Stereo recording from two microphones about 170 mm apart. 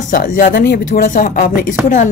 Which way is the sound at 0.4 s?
50° left (ahead or behind).